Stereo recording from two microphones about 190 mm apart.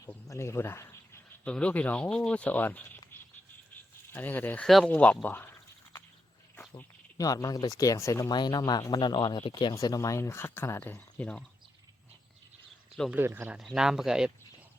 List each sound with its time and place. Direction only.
0.0 s speech: 15° left (ahead or behind)
4.1 s speech: 10° left (ahead or behind)
13.0 s speech: 10° right (ahead or behind)